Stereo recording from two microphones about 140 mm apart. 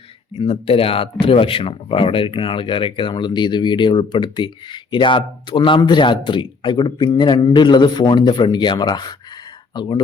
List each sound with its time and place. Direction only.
0.3 s speech: 40° left (ahead or behind)